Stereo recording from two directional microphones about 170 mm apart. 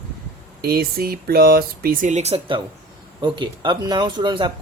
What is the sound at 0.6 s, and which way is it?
Speech, 65° right (ahead or behind).